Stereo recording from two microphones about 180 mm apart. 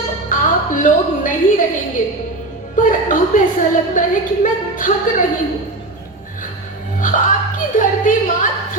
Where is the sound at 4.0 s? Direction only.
45° left (ahead or behind).